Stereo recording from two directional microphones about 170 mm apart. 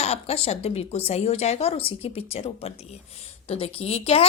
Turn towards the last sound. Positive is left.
turn(degrees=35)  # may be behind; listen again after turning